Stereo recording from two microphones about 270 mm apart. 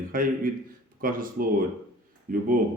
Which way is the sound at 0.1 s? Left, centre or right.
Right.